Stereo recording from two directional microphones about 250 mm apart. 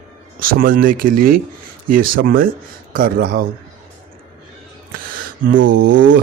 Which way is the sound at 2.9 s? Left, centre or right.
Right.